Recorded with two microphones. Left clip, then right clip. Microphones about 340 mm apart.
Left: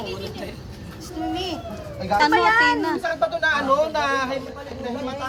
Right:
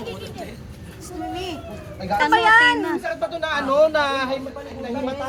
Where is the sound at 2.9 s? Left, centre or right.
Centre.